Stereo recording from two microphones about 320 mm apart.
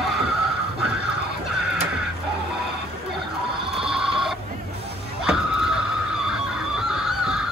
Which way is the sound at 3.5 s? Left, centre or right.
Centre.